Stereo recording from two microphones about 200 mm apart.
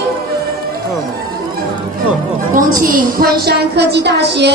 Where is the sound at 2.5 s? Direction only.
45° right (ahead or behind).